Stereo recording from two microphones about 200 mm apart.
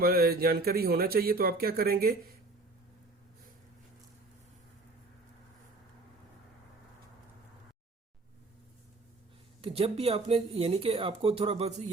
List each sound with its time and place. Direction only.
0.0 s speech: 50° right (ahead or behind)
9.6 s speech: 25° right (ahead or behind)